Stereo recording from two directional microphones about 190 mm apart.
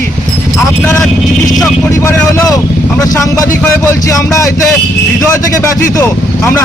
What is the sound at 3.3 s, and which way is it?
Speech, 15° left (ahead or behind).